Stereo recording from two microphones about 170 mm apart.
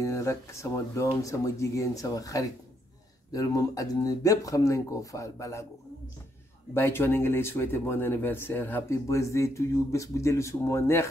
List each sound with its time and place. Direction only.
0.0 s speech: 20° left (ahead or behind)
6.7 s speech: 15° left (ahead or behind)